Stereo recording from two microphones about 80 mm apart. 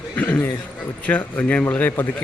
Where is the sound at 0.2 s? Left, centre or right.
Left.